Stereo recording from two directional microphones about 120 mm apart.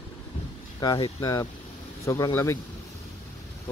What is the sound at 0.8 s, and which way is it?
Speech, 35° left (ahead or behind).